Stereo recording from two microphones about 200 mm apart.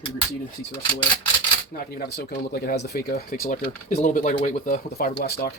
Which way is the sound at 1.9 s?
50° left (ahead or behind).